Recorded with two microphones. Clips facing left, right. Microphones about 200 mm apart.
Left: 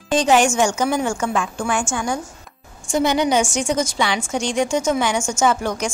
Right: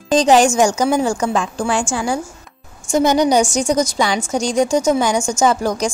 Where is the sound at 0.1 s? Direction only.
40° right (ahead or behind).